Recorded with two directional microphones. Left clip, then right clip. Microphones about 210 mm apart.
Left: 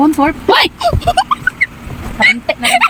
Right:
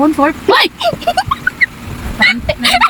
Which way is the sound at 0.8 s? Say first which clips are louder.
Left 1 dB; 5° right (ahead or behind).